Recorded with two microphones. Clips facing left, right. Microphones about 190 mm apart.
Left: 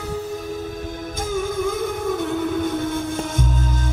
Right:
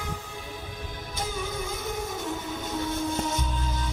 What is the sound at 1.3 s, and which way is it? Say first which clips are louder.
Music: left 13 dB; 50° left (ahead or behind).